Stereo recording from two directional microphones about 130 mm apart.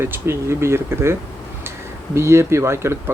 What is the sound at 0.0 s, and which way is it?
Speech, 20° right (ahead or behind).